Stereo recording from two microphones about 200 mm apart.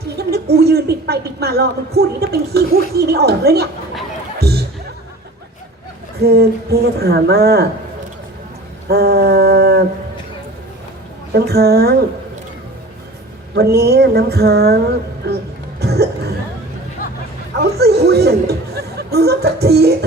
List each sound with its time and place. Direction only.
0.2 s speech: 55° right (ahead or behind)
4.4 s music: 55° right (ahead or behind)
6.2 s speech: 55° right (ahead or behind)
8.9 s speech: 55° right (ahead or behind)
11.3 s speech: 55° right (ahead or behind)
13.6 s speech: 55° right (ahead or behind)
15.8 s cough: 55° right (ahead or behind)
17.6 s chatter: 50° right (ahead or behind)